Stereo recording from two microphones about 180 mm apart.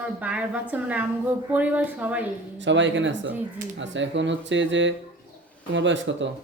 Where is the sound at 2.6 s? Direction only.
90° right.